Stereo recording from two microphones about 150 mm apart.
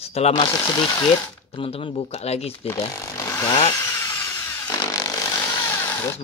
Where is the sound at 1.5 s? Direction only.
35° left (ahead or behind).